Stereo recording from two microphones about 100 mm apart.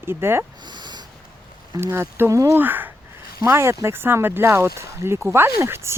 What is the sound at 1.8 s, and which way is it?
Speech, 25° right (ahead or behind).